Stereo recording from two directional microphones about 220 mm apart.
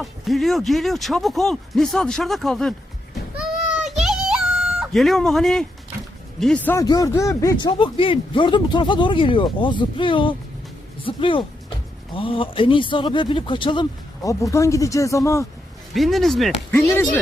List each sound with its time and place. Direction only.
0.0 s speech: centre (ahead or behind)
3.8 s a sound: 5° right (ahead or behind)
6.4 s speech: 5° left (ahead or behind)
16.0 s speech: centre (ahead or behind)